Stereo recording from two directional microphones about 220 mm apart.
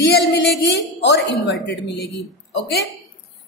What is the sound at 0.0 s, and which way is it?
A woman's voice, 50° left (ahead or behind).